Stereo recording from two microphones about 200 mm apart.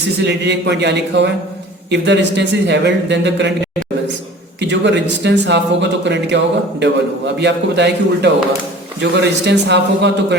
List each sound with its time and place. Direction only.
0.2 s a man's voice: 60° right (ahead or behind)
4.6 s a man's voice: 60° right (ahead or behind)